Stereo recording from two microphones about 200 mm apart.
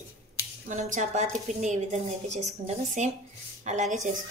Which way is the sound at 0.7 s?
40° right (ahead or behind).